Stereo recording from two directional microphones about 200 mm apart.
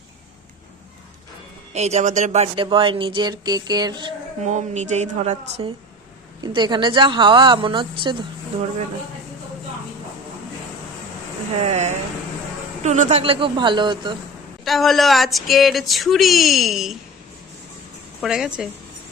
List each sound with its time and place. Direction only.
1.7 s speech: 35° right (ahead or behind)
4.4 s a woman's voice: 35° right (ahead or behind)
6.4 s speech: 20° right (ahead or behind)
11.6 s a woman's voice: 35° right (ahead or behind)
14.6 s speech: centre (ahead or behind)
18.2 s speech: 5° right (ahead or behind)